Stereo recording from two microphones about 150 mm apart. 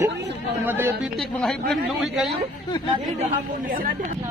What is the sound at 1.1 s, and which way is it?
Speech, 5° left (ahead or behind).